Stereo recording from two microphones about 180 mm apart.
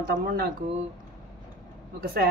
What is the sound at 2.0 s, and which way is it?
Speech, 55° right (ahead or behind).